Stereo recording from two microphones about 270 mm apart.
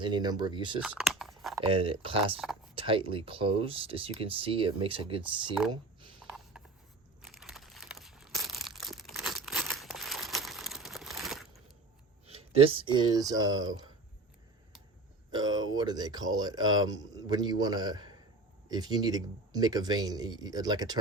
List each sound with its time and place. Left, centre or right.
0.0 s a man's voice: centre
0.8 s a sound: centre
1.5 s speech: centre
6.2 s a sound: centre
7.2 s crumpling: centre
12.3 s speech: right
15.3 s a man's voice: centre